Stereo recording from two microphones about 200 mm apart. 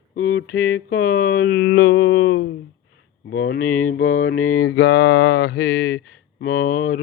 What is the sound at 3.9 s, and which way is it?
Mantra, 90° left.